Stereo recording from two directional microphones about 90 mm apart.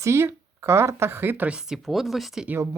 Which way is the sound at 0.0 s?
30° right (ahead or behind).